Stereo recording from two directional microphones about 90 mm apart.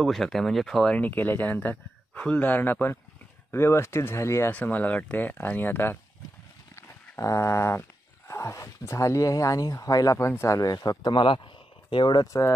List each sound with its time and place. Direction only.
0.0 s speech: centre (ahead or behind); by 4.5 s 30° left (ahead or behind)
4.5 s speech: 15° left (ahead or behind)
6.7 s a sound: 35° left (ahead or behind)
8.3 s speech: 35° left (ahead or behind)
10.6 s speech: 45° left (ahead or behind)
11.1 s speech: 70° left (ahead or behind)
12.3 s speech: 35° left (ahead or behind)